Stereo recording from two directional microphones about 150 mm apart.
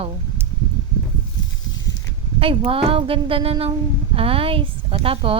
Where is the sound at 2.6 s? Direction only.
40° right (ahead or behind).